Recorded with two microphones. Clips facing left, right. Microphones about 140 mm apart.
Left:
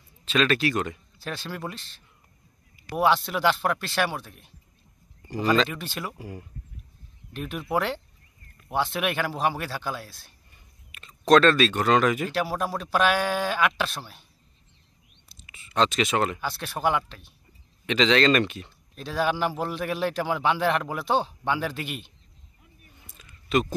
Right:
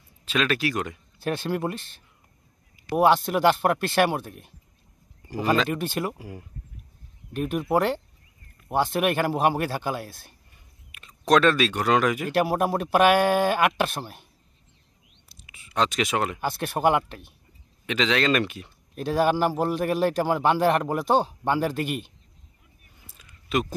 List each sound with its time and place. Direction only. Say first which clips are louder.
0.2 s speech: left 2 dB; 10° right (ahead or behind)
1.2 s a man's voice: right 7 dB; 50° right (ahead or behind)
5.3 s speech: even; 10° right (ahead or behind)
5.7 s a man's voice: right 7 dB; 50° right (ahead or behind)
6.1 s speech: left 1 dB; 10° right (ahead or behind)
7.3 s a man's voice: right 4 dB; 45° right (ahead or behind)
10.9 s speech: left 2 dB; 10° right (ahead or behind)
12.3 s a man's voice: right 5 dB; 50° right (ahead or behind)
15.2 s a sound: left 1 dB; 10° right (ahead or behind)
16.3 s a man's voice: right 5 dB; 50° right (ahead or behind)
17.8 s speech: left 3 dB; 5° right (ahead or behind)
18.9 s a man's voice: right 4 dB; 50° right (ahead or behind)
23.1 s a sound: left 2 dB; 10° right (ahead or behind)